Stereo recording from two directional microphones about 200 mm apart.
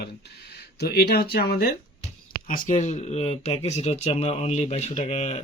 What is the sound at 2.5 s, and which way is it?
Speech, 35° left (ahead or behind).